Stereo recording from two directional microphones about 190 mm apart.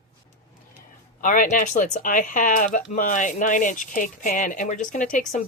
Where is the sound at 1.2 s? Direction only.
45° left (ahead or behind).